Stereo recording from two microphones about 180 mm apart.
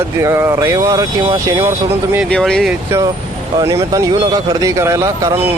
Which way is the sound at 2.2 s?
5° left (ahead or behind).